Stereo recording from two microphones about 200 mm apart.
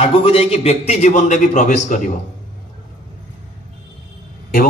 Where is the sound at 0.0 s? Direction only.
30° left (ahead or behind).